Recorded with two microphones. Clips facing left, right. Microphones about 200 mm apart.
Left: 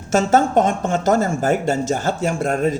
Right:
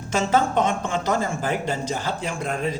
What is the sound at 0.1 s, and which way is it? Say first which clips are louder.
Speech: left 5 dB; 45° left (ahead or behind).